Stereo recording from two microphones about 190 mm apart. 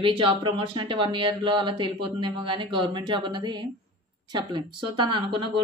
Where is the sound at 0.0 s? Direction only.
25° right (ahead or behind).